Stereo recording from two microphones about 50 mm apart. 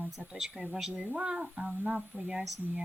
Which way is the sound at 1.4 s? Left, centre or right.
Right.